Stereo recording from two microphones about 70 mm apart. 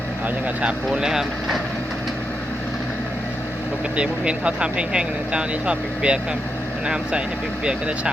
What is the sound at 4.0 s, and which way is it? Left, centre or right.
Speech, centre.